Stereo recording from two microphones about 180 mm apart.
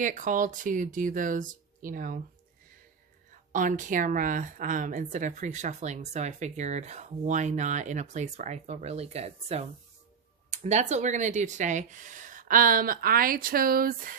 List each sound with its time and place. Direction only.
0.0 s speech: 45° right (ahead or behind)
3.3 s speech: 45° right (ahead or behind)